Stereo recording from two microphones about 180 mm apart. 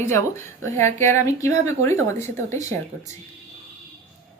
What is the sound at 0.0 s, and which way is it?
A woman's voice, 15° left (ahead or behind).